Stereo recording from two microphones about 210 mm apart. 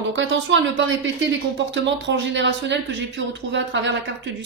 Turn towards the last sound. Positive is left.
turn(degrees=-60)  # may be behind; listen again after turning